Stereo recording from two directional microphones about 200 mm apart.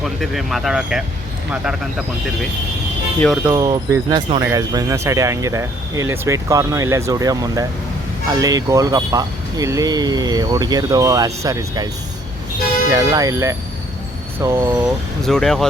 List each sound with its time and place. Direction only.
0.0 s speech: centre (ahead or behind)
3.2 s speech: centre (ahead or behind)
3.4 s speech: 20° right (ahead or behind)
12.9 s speech: 15° right (ahead or behind)
15.2 s speech: centre (ahead or behind)